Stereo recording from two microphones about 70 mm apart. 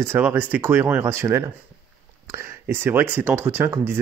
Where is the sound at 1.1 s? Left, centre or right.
Right.